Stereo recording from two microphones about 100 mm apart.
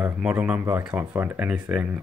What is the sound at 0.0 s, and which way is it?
Speech, 15° right (ahead or behind).